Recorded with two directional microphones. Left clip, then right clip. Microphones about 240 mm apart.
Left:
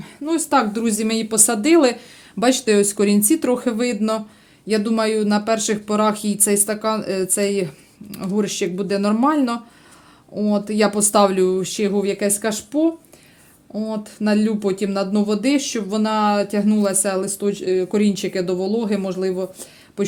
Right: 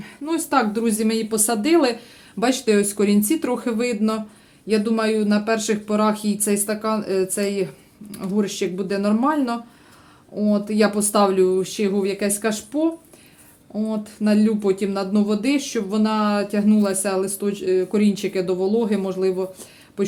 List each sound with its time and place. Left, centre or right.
0.0 s speech: left